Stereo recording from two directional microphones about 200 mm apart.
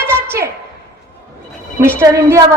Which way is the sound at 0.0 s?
10° right (ahead or behind).